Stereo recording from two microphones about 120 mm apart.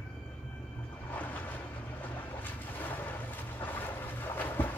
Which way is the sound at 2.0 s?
15° left (ahead or behind).